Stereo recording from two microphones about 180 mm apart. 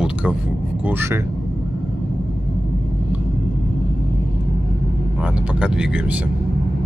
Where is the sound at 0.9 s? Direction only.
15° right (ahead or behind).